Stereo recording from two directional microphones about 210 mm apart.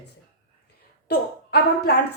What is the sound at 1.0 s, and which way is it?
Speech, 50° left (ahead or behind).